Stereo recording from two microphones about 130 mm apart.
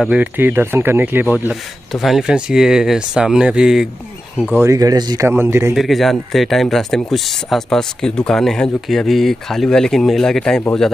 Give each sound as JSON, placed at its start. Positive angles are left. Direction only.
{"t": 0.0, "sound": "speech", "side_deg": -10}
{"t": 1.9, "sound": "speech", "side_deg": 0}
{"t": 4.6, "sound": "speech", "side_deg": -25}
{"t": 5.8, "sound": "speech", "side_deg": 0}